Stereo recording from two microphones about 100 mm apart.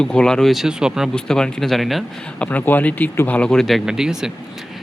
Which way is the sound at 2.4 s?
15° left (ahead or behind).